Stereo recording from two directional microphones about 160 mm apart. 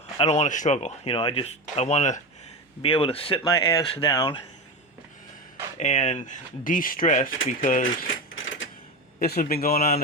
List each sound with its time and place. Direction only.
0.2 s speech: 45° left (ahead or behind)
2.8 s speech: 35° left (ahead or behind)
3.4 s speech: 20° left (ahead or behind)
5.7 s speech: 45° left (ahead or behind)
9.2 s a man's voice: 70° left (ahead or behind)